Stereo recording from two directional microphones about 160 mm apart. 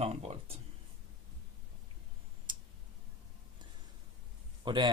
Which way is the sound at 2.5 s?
30° right (ahead or behind).